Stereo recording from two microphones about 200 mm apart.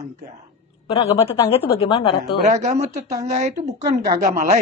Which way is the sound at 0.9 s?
30° left (ahead or behind).